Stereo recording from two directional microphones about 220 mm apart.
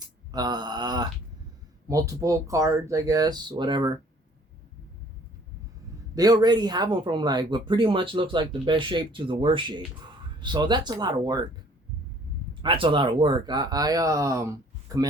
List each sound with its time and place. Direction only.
0.3 s a sound: 20° right (ahead or behind)
1.9 s speech: 15° right (ahead or behind)
6.1 s speech: 15° right (ahead or behind)
12.6 s speech: 25° right (ahead or behind)